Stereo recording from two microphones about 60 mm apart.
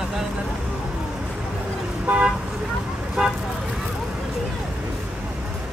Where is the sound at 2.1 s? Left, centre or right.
Right.